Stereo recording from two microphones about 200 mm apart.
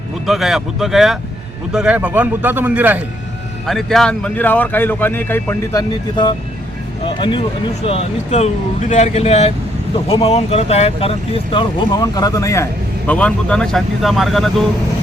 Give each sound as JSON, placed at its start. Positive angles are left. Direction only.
{"t": 0.3, "sound": "speech", "side_deg": 0}
{"t": 7.0, "sound": "speech", "side_deg": 25}